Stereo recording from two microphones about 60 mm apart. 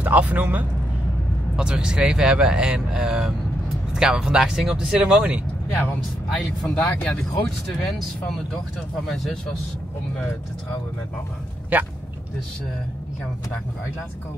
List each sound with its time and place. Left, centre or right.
0.0 s speech: right
1.6 s speech: centre
6.3 s speech: centre
11.7 s speech: right